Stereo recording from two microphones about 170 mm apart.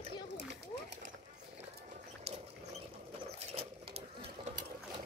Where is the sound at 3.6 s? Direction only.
35° right (ahead or behind).